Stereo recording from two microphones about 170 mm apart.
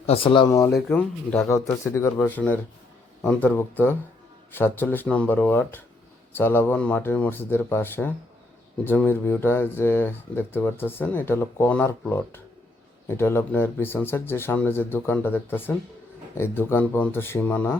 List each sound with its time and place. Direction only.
0.0 s speech: 35° left (ahead or behind)
0.9 s speech: 10° left (ahead or behind)